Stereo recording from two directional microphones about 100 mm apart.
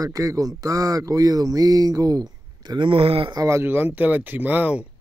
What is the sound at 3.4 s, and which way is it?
Speech, 25° right (ahead or behind).